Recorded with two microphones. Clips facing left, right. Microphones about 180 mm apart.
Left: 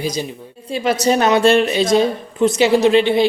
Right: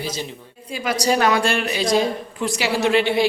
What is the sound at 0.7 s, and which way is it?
A woman's voice, 30° left (ahead or behind).